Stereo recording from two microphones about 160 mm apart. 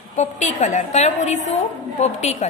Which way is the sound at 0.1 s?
45° left (ahead or behind).